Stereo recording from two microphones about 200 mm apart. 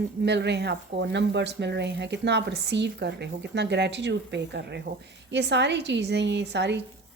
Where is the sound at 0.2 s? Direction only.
60° right (ahead or behind).